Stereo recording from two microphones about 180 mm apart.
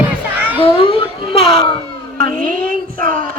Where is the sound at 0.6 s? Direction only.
30° left (ahead or behind).